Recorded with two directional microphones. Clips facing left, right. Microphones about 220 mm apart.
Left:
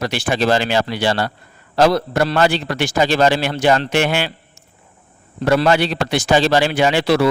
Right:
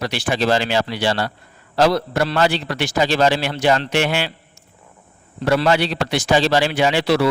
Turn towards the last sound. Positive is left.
turn(degrees=50)  # may be behind; listen again after turning